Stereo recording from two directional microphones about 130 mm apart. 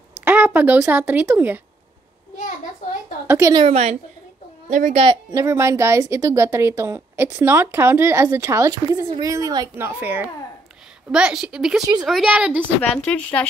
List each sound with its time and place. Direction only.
0.2 s speech: 15° right (ahead or behind)
3.3 s a woman's voice: 20° right (ahead or behind)
3.5 s a woman's voice: 55° right (ahead or behind)
4.6 s a child's voice: 65° right (ahead or behind)
5.3 s a woman's voice: 20° right (ahead or behind)
9.8 s a woman's voice: 15° right (ahead or behind)
12.9 s speech: 10° left (ahead or behind)